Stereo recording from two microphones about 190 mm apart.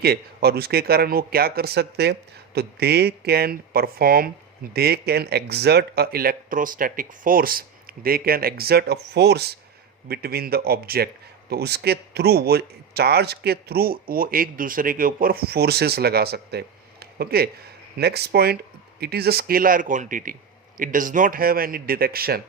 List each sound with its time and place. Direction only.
0.0 s a man's voice: 55° right (ahead or behind)